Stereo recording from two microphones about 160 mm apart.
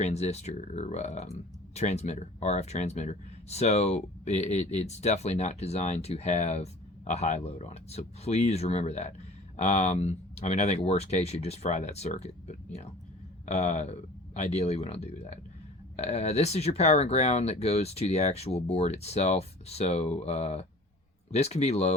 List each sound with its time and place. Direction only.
0.0 s speech: 45° left (ahead or behind)